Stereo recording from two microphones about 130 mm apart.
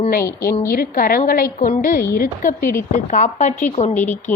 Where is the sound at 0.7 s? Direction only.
90° left.